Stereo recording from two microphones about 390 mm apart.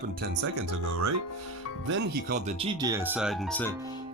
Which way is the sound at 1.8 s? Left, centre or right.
Right.